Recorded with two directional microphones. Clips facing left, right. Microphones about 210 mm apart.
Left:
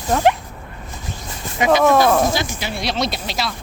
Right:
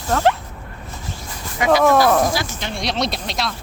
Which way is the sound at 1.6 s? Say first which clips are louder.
Left 1 dB; 20° left (ahead or behind).